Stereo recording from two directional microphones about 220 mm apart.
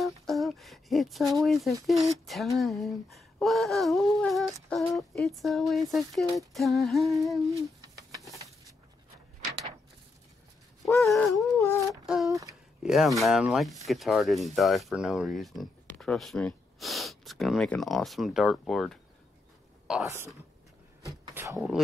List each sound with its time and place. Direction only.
0.0 s a sound: centre (ahead or behind)
2.2 s speech: centre (ahead or behind)
7.4 s a sound: 15° right (ahead or behind)
11.0 s speech: centre (ahead or behind)
11.5 s humming: 15° left (ahead or behind)
11.9 s speech: centre (ahead or behind)
12.3 s speech: 15° right (ahead or behind)
12.8 s speech: centre (ahead or behind)
21.5 s speech: centre (ahead or behind)